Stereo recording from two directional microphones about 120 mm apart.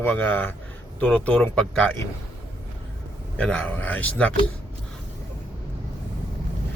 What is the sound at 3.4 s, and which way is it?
Speech, 10° left (ahead or behind).